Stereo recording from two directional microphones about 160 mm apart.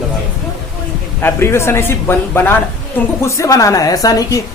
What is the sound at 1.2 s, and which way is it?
A woman's voice, 15° left (ahead or behind).